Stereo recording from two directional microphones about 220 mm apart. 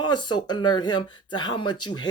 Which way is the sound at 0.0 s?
20° left (ahead or behind).